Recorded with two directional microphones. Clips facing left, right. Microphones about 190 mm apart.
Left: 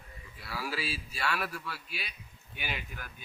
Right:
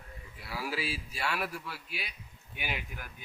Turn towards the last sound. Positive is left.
turn(degrees=-15)  # may be behind; listen again after turning